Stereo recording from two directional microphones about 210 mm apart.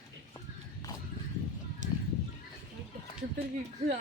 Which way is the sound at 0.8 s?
15° left (ahead or behind).